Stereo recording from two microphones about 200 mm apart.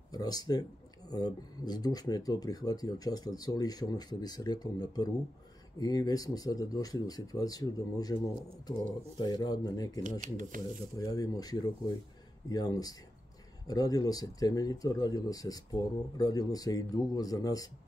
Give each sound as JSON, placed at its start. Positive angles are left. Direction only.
{"t": 0.1, "sound": "speech", "side_deg": 20}
{"t": 10.2, "sound": "speech", "side_deg": -40}
{"t": 11.0, "sound": "speech", "side_deg": 20}